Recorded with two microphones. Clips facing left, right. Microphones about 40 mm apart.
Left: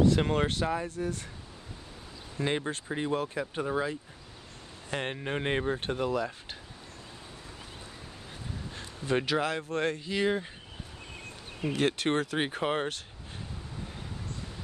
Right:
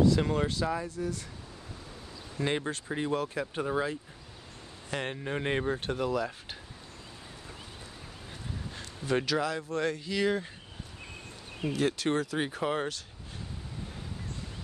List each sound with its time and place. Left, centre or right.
0.0 s speech: left
2.3 s speech: centre
4.9 s speech: left
5.5 s speech: centre
8.7 s a sound: centre
9.4 s speech: left
10.0 s speech: centre
11.6 s speech: left